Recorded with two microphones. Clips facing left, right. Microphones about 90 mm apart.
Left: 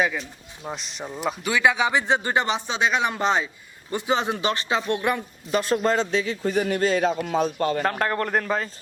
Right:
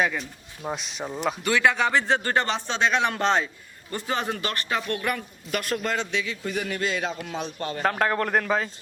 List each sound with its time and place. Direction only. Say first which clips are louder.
0.0 s speech: left 1 dB; centre (ahead or behind)
3.9 s speech: left 4 dB; 15° left (ahead or behind); by 7.8 s 40° left (ahead or behind)
7.8 s speech: even; centre (ahead or behind)